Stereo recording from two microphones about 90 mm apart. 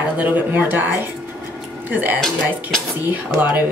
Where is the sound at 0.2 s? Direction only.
20° right (ahead or behind).